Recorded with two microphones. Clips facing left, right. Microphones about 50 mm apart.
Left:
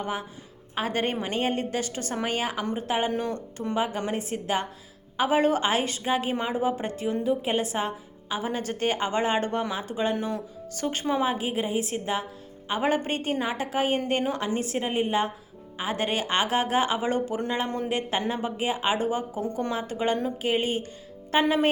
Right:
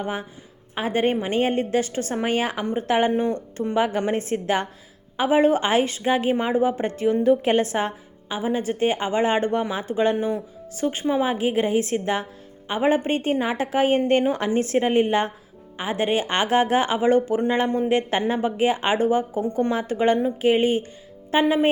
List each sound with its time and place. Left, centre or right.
0.0 s speech: right
3.1 s speech: right
5.1 s speech: right
7.3 s a woman's voice: right
8.4 s speech: right
11.5 s a woman's voice: right
12.6 s speech: right
15.8 s speech: right
16.3 s speech: right
21.3 s speech: centre